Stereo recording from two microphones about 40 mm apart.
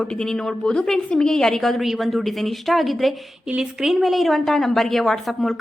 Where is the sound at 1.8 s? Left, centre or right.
Centre.